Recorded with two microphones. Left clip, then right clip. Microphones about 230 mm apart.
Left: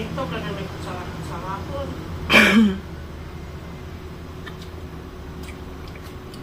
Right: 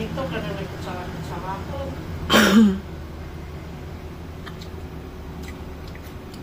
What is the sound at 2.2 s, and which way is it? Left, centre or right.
Throat clearing, centre.